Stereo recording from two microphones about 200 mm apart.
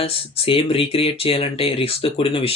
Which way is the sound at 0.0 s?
30° left (ahead or behind).